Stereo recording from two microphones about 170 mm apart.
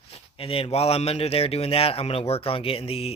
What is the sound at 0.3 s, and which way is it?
Speech, 35° left (ahead or behind).